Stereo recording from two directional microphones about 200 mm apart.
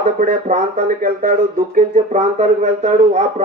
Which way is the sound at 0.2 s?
40° right (ahead or behind).